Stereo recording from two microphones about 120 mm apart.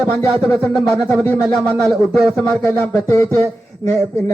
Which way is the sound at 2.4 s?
25° left (ahead or behind).